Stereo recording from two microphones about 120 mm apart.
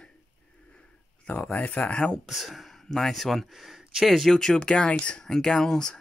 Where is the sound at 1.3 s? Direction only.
15° left (ahead or behind).